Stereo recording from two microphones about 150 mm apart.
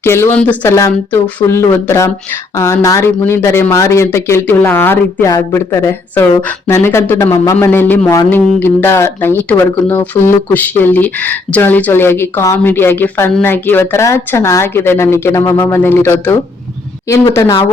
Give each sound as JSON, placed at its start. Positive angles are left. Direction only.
{"t": 0.0, "sound": "a woman's voice", "side_deg": 15}